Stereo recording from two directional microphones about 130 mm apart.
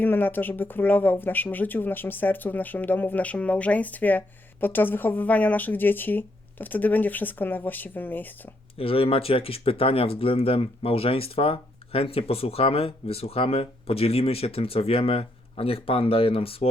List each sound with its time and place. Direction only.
0.0 s speech: 15° left (ahead or behind)
8.8 s speech: 45° left (ahead or behind)